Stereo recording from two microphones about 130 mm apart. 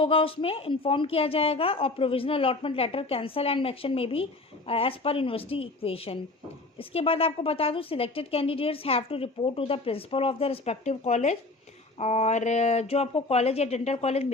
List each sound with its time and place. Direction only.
0.0 s a woman's voice: 45° left (ahead or behind)